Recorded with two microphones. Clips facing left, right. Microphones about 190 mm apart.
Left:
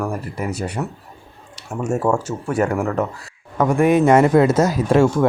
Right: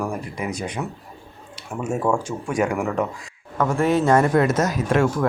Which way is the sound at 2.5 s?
10° right (ahead or behind).